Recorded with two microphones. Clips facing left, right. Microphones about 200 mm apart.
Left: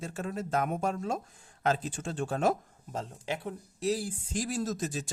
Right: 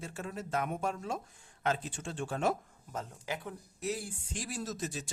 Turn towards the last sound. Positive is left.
turn(degrees=45)  # may be behind; listen again after turning